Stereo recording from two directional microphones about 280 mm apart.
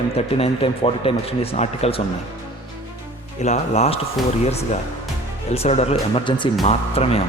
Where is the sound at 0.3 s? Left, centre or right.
Left.